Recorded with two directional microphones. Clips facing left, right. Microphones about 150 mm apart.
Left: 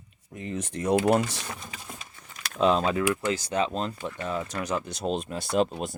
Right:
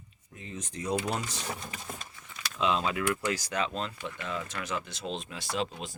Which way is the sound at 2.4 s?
55° left (ahead or behind).